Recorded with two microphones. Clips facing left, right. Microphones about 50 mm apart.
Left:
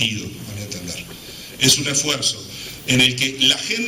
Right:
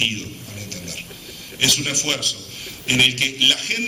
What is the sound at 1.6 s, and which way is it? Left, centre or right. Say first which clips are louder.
A man's voice: left 2 dB; right.